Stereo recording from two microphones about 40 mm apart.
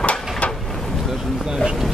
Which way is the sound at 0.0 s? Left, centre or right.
Left.